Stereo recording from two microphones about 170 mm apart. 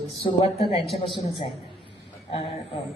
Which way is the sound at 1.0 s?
30° left (ahead or behind).